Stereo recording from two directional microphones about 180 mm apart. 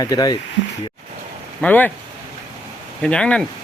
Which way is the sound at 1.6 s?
10° left (ahead or behind).